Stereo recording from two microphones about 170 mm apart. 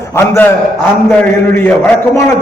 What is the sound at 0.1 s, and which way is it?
A man's voice, 15° left (ahead or behind).